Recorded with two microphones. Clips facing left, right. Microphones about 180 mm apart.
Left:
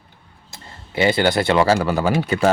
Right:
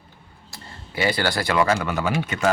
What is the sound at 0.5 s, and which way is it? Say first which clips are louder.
Speech: left 5 dB; 25° left (ahead or behind).